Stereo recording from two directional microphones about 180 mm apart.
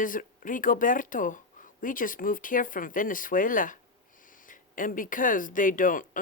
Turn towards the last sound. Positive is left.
turn(degrees=50)  # may be behind; listen again after turning